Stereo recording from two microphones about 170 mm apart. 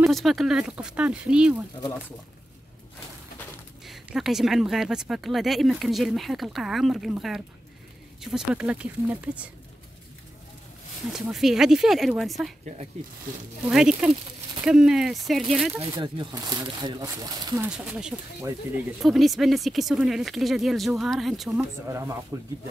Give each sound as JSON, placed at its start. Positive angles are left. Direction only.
{"t": 0.0, "sound": "speech", "side_deg": 0}
{"t": 3.8, "sound": "speech", "side_deg": 0}
{"t": 11.1, "sound": "speech", "side_deg": 0}
{"t": 13.7, "sound": "speech", "side_deg": -5}
{"t": 15.9, "sound": "speech", "side_deg": -25}
{"t": 17.6, "sound": "speech", "side_deg": -5}
{"t": 21.8, "sound": "speech", "side_deg": -15}